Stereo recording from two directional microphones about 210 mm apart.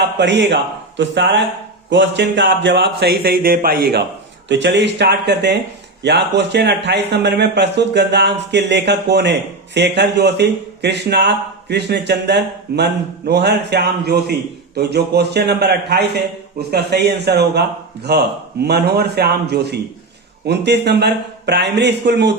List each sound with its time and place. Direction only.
0.2 s a man's voice: 55° right (ahead or behind)
4.4 s a man's voice: 55° right (ahead or behind)